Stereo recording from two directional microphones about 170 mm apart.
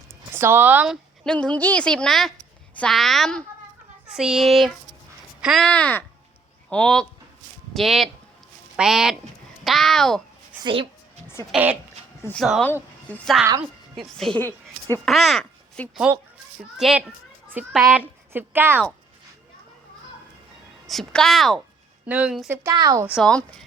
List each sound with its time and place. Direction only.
0.3 s speech: 15° right (ahead or behind)
1.2 s a woman's voice: 5° left (ahead or behind)
10.6 s speech: 30° right (ahead or behind)
11.5 s speech: 10° right (ahead or behind)
12.2 s a woman's voice: 5° left (ahead or behind)
15.0 s a woman's voice: centre (ahead or behind)
18.3 s speech: 10° right (ahead or behind)
20.8 s a woman's voice: centre (ahead or behind)
22.5 s a woman's voice: 20° right (ahead or behind)
23.0 s a woman's voice: centre (ahead or behind)